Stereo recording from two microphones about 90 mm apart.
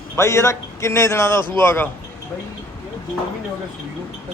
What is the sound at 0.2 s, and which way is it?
A man's voice, 30° left (ahead or behind).